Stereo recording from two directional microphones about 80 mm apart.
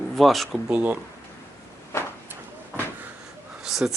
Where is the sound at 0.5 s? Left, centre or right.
Centre.